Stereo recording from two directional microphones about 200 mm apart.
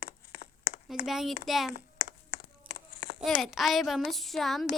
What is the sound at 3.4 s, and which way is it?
Child singing, centre (ahead or behind).